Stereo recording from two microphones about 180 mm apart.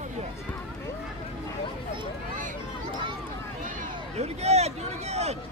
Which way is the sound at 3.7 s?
35° right (ahead or behind).